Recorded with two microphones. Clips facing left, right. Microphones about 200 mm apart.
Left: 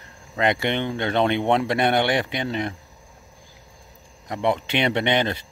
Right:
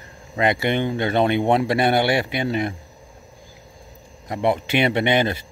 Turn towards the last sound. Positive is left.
turn(degrees=-10)  # may be behind; listen again after turning